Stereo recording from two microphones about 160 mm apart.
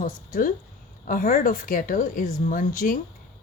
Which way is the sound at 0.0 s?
55° left (ahead or behind).